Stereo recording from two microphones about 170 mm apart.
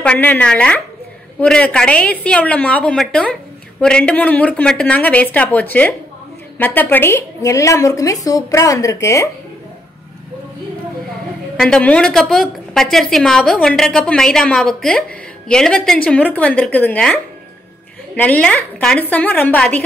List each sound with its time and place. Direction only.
0.0 s a woman's voice: 10° left (ahead or behind)
11.5 s a woman's voice: 5° left (ahead or behind)
18.1 s a woman's voice: 10° left (ahead or behind)